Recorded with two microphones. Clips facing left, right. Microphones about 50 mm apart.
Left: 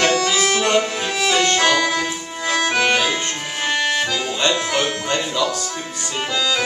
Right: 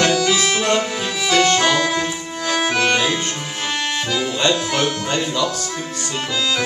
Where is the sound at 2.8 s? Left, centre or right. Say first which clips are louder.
Even; centre.